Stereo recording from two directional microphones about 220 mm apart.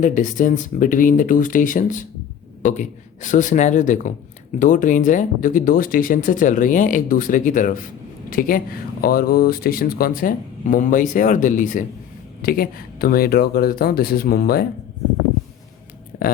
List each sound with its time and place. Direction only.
0.0 s speech: 35° left (ahead or behind)
16.1 s speech: 45° left (ahead or behind)